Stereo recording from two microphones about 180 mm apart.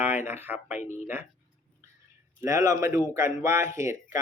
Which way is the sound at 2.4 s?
15° right (ahead or behind).